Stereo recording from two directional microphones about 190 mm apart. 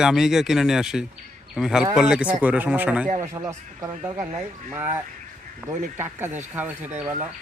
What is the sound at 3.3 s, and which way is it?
Speech, 20° right (ahead or behind).